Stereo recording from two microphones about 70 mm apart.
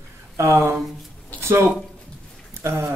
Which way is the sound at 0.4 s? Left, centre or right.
Right.